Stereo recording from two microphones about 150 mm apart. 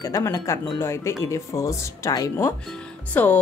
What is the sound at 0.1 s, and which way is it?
Speech, 20° left (ahead or behind).